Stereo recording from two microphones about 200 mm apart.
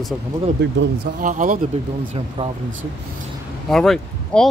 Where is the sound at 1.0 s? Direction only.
40° right (ahead or behind).